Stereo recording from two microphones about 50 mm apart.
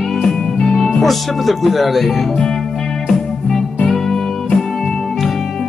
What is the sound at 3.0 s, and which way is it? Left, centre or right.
Music, centre.